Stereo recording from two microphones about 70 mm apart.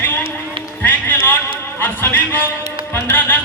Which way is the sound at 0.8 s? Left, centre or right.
Left.